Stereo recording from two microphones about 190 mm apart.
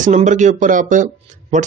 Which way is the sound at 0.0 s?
40° right (ahead or behind).